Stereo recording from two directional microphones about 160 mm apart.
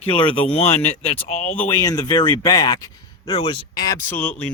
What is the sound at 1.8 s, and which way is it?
Speech, 25° left (ahead or behind).